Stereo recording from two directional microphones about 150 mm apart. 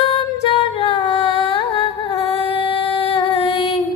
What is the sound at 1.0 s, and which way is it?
Music, 35° left (ahead or behind).